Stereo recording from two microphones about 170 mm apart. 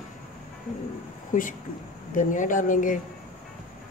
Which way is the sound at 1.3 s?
50° left (ahead or behind).